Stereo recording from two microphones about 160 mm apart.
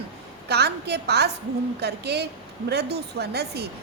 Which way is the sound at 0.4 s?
90° right.